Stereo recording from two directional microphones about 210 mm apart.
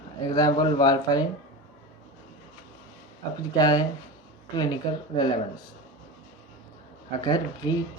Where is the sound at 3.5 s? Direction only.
20° left (ahead or behind).